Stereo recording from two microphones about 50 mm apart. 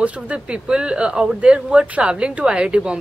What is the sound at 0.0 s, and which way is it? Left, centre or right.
Speech, right.